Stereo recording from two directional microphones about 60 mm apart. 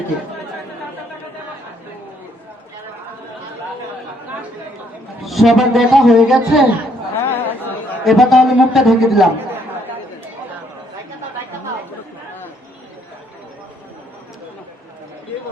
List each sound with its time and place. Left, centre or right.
5.2 s speech: centre
7.2 s chatter: left
8.0 s speech: centre